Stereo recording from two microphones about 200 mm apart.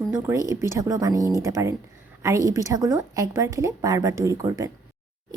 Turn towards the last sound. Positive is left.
turn(degrees=-15)  # may be behind; listen again after turning